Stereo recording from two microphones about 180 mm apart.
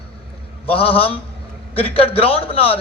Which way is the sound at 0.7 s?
30° left (ahead or behind).